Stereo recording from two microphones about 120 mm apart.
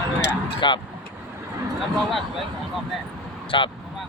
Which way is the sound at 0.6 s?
40° left (ahead or behind).